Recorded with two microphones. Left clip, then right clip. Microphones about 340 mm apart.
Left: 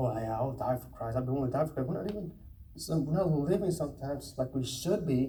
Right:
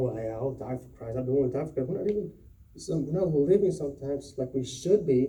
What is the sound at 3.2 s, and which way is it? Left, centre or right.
A man's voice, left.